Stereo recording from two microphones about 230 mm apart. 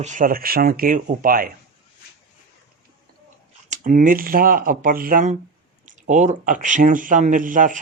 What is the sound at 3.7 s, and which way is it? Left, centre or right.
Speech, right.